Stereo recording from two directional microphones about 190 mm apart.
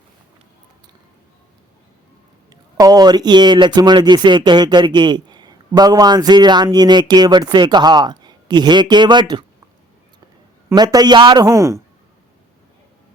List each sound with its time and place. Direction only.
2.7 s speech: 20° right (ahead or behind)
10.7 s speech: 20° right (ahead or behind)